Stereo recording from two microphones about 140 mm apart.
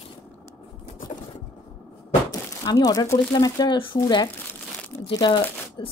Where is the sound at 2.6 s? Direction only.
25° left (ahead or behind).